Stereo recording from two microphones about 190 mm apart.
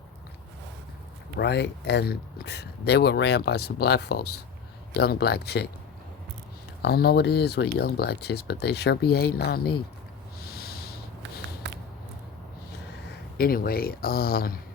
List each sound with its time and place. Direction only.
1.4 s speech: 60° left (ahead or behind)
6.8 s speech: 55° left (ahead or behind)
10.4 s snort: 55° left (ahead or behind)
13.1 s speech: 55° left (ahead or behind)